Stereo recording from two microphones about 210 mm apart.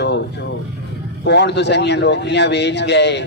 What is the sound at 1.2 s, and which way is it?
A man's voice, 55° left (ahead or behind).